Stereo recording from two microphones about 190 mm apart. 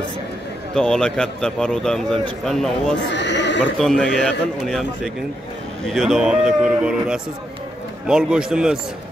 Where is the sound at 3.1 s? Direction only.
65° left (ahead or behind).